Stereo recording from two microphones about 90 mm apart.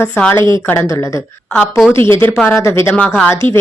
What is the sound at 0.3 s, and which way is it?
Speech, 60° right (ahead or behind).